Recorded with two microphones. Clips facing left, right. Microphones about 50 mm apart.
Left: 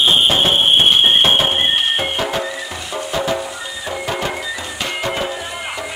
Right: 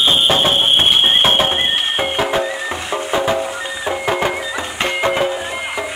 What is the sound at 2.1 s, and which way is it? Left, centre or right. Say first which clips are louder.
Music: right 3 dB; centre.